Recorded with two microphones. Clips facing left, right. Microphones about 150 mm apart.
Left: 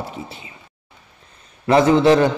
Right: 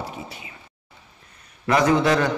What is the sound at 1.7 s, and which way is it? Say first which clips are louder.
Speech: left 5 dB; 30° left (ahead or behind).